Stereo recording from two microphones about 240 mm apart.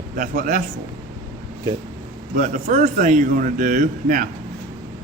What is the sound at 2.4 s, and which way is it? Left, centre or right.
Speech, right.